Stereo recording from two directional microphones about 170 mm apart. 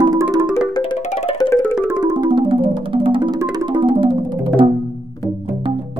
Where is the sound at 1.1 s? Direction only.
40° left (ahead or behind).